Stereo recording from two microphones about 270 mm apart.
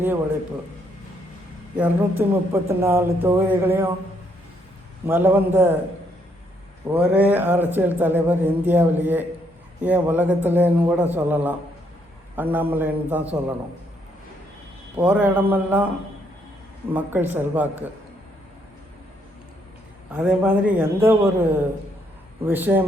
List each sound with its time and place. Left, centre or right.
1.7 s speech: centre
5.0 s speech: centre
6.8 s speech: centre
14.9 s speech: centre
16.9 s speech: centre
20.1 s speech: centre